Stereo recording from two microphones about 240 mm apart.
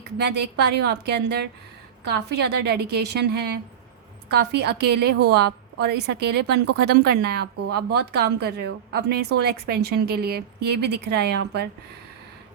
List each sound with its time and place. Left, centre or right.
0.2 s a woman's voice: right